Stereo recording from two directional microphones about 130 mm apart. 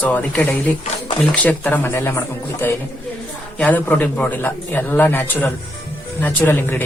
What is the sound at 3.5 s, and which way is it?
A man's voice, 10° left (ahead or behind).